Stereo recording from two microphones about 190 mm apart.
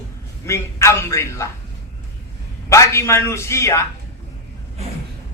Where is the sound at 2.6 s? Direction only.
15° left (ahead or behind).